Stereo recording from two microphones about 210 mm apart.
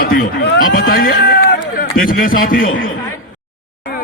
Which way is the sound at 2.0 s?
40° left (ahead or behind).